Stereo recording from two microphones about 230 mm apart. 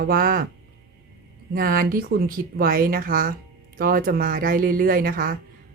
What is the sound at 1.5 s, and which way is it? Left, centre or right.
Speech, right.